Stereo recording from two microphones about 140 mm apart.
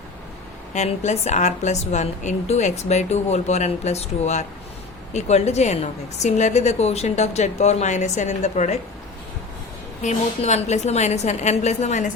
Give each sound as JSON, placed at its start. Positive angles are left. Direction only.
{"t": 0.7, "sound": "a woman's voice", "side_deg": 55}
{"t": 10.0, "sound": "a woman's voice", "side_deg": 55}